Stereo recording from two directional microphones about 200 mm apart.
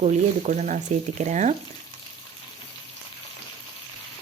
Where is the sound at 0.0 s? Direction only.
35° right (ahead or behind).